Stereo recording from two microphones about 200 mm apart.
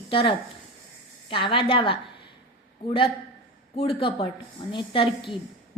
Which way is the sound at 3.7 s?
30° left (ahead or behind).